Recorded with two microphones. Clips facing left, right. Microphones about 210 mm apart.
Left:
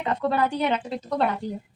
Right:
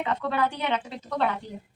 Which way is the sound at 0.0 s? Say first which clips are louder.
Left 3 dB; 35° left (ahead or behind).